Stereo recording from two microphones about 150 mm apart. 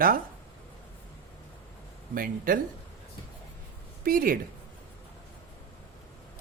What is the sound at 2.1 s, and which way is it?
Speech, 70° right (ahead or behind).